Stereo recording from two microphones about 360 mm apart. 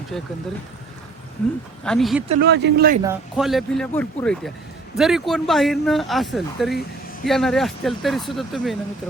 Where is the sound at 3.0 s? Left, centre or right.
Centre.